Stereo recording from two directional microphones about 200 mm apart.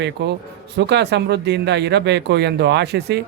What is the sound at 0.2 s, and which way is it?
A man's voice, 60° right (ahead or behind).